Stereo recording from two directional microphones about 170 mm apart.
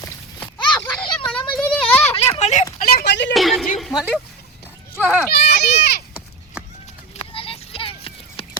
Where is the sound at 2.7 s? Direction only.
65° left (ahead or behind); by 3.3 s 90° left.